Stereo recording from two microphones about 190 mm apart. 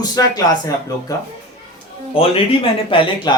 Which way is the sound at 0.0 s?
20° left (ahead or behind).